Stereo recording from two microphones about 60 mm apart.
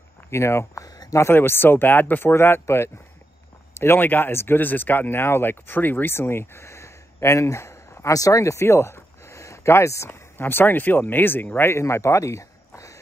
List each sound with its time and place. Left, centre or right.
0.3 s speech: left
0.8 s a sound: left
1.2 s speech: left
10.0 s a man's voice: left